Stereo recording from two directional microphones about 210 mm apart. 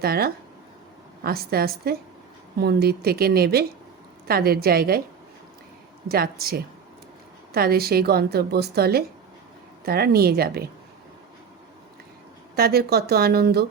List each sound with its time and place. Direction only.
0.0 s a woman's voice: 45° right (ahead or behind)
6.1 s a woman's voice: 45° right (ahead or behind)
12.5 s a woman's voice: 45° right (ahead or behind)